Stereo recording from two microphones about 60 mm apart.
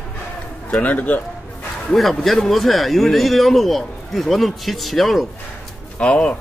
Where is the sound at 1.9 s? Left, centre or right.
Centre.